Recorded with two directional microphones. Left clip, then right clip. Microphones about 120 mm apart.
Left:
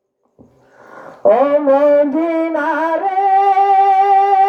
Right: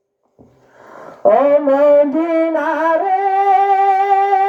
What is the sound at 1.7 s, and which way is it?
Music, 25° right (ahead or behind).